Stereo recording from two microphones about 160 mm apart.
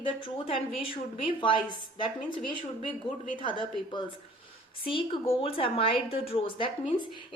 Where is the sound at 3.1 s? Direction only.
30° left (ahead or behind).